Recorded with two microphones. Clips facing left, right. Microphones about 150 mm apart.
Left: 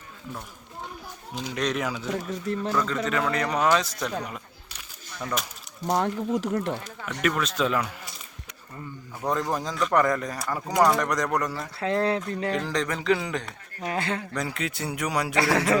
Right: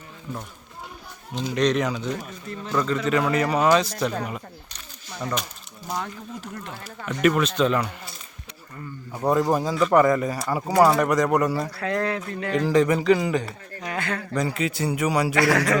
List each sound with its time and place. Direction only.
1.4 s a man's voice: 5° left (ahead or behind)
5.9 s speech: 60° left (ahead or behind); by 6.7 s 80° left
7.2 s a man's voice: 5° right (ahead or behind)
9.2 s speech: 10° right (ahead or behind)
11.8 s speech: 25° left (ahead or behind)
12.5 s a man's voice: 5° right (ahead or behind)
13.8 s speech: 30° left (ahead or behind)
14.3 s a man's voice: centre (ahead or behind)
15.4 s speech: 25° left (ahead or behind)